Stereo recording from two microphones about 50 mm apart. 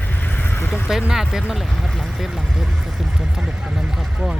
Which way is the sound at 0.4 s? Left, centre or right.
Left.